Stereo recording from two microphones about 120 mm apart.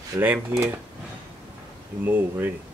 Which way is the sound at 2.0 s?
15° right (ahead or behind).